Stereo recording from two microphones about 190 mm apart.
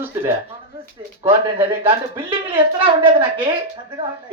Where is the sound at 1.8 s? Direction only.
30° right (ahead or behind).